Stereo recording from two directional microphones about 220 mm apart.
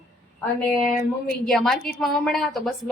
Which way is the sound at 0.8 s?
35° left (ahead or behind).